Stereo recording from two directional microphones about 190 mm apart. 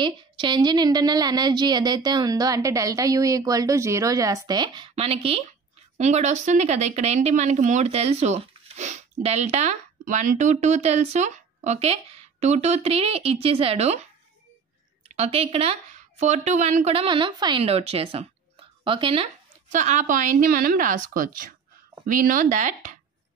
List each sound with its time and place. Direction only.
0.0 s a woman's voice: 25° right (ahead or behind)
15.1 s a woman's voice: 30° right (ahead or behind)
19.7 s a woman's voice: 40° right (ahead or behind)